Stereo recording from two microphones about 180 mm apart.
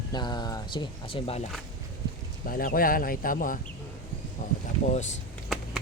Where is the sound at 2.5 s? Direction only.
55° left (ahead or behind).